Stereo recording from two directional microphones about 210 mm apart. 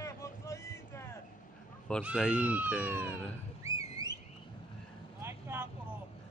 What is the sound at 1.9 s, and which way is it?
Speech, 5° left (ahead or behind).